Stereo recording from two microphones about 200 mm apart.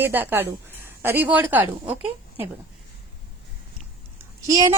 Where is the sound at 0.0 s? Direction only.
10° right (ahead or behind).